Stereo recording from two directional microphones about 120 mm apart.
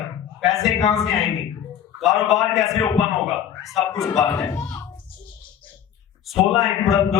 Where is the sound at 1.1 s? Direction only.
Centre (ahead or behind).